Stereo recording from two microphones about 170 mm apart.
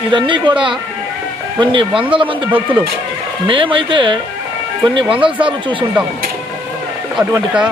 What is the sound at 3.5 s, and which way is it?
Speech, 30° right (ahead or behind).